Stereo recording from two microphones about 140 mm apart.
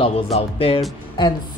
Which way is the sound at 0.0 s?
45° left (ahead or behind).